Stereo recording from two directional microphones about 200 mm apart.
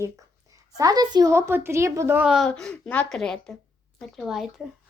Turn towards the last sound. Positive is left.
turn(degrees=0)  # may be behind; listen again after turning